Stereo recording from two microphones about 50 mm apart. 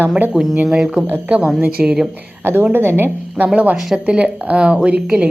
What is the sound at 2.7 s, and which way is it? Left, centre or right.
Speech, right.